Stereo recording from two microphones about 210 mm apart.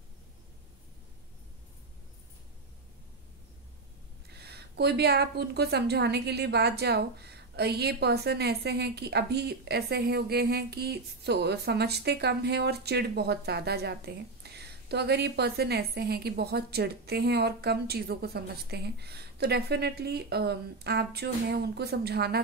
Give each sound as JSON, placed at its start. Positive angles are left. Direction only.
{"t": 4.3, "sound": "a woman's voice", "side_deg": -50}